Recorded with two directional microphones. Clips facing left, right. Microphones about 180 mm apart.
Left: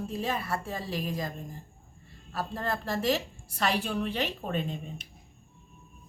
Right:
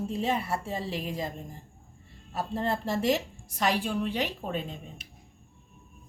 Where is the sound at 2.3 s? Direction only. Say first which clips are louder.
Right 3 dB; 25° right (ahead or behind); by 4.6 s 5° right (ahead or behind).